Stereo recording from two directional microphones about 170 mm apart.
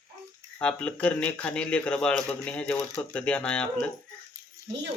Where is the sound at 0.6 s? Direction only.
5° left (ahead or behind).